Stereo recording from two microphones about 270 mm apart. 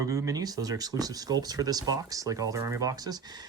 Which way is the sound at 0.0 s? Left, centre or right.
Centre.